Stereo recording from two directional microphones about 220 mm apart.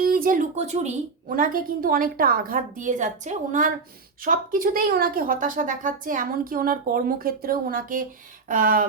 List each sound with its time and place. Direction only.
0.0 s a woman's voice: 40° right (ahead or behind)